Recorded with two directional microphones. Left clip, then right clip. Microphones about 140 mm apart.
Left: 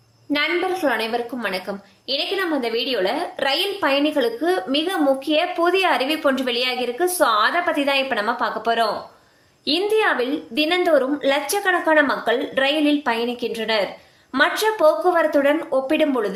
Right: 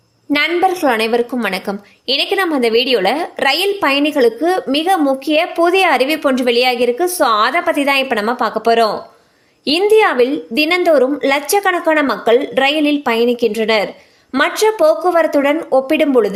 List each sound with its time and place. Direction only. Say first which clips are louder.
0.3 s a woman's voice: right 7 dB; 75° right (ahead or behind); by 16.3 s 50° right (ahead or behind)